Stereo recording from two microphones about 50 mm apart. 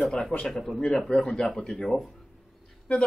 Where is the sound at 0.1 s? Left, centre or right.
Centre.